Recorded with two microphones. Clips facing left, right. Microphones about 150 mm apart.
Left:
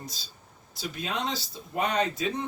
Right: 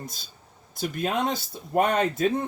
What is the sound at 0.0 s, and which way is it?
Speech, 50° right (ahead or behind).